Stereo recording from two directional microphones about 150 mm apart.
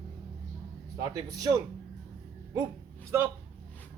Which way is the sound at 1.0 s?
25° right (ahead or behind).